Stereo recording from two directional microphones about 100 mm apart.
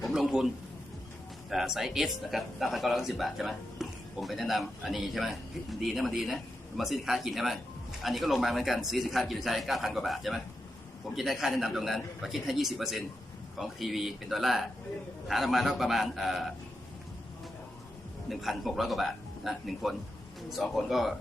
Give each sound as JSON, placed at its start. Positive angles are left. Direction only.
{"t": 0.0, "sound": "a man's voice", "side_deg": 0}
{"t": 18.3, "sound": "speech", "side_deg": 0}